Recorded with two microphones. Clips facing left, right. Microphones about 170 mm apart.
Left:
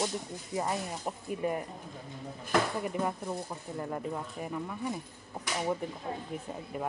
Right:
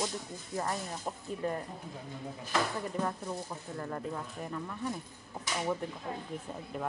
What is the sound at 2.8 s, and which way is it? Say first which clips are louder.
Speech: left 2 dB; 10° left (ahead or behind).